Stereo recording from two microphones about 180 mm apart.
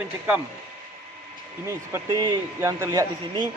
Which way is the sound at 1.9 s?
20° right (ahead or behind).